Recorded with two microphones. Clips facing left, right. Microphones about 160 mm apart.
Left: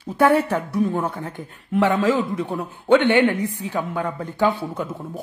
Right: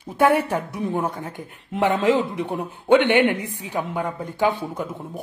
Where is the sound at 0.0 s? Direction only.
15° right (ahead or behind).